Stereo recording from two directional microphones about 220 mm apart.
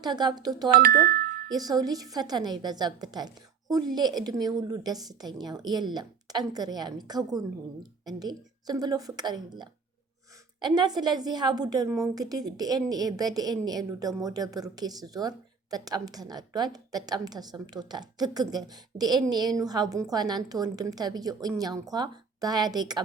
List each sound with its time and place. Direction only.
0.0 s a woman's voice: 20° right (ahead or behind)
0.7 s speech: 40° right (ahead or behind)
1.5 s a woman's voice: 15° right (ahead or behind)